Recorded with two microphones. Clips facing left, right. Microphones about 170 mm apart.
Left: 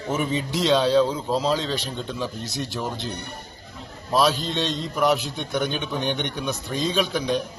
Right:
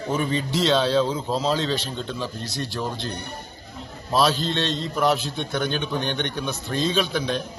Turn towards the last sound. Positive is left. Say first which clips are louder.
# left 1 dB
turn(degrees=10)  # may be behind; listen again after turning